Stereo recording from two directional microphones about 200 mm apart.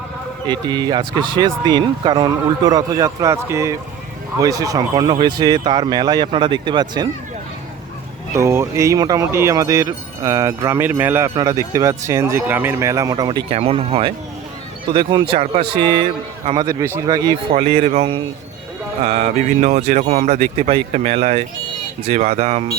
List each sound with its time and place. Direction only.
0.4 s speech: 20° right (ahead or behind)
8.4 s speech: 15° right (ahead or behind)
13.2 s speech: 30° right (ahead or behind)
17.5 s speech: 30° right (ahead or behind)